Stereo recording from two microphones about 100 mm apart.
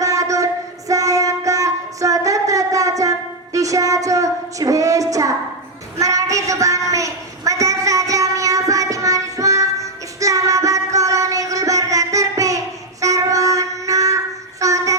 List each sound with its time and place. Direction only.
0.0 s music: 35° right (ahead or behind)
6.0 s a sound: 35° right (ahead or behind)
14.6 s train: 35° right (ahead or behind)